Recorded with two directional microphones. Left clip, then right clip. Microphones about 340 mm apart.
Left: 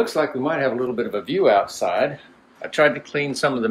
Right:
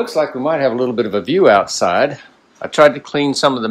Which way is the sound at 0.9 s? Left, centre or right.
Right.